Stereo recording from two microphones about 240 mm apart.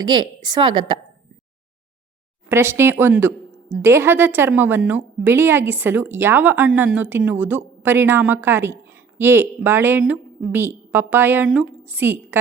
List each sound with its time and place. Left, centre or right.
0.0 s a woman's voice: centre
2.5 s a woman's voice: centre